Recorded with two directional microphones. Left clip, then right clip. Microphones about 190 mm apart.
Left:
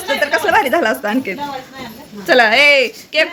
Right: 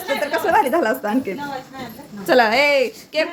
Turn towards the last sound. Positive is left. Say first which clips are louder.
# left 5 dB
turn(degrees=-5)  # may be behind; listen again after turning